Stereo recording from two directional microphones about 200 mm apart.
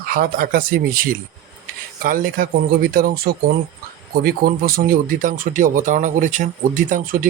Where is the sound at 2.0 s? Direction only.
45° right (ahead or behind).